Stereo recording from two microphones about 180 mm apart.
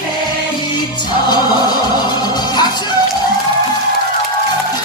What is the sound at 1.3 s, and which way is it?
Music, 25° left (ahead or behind).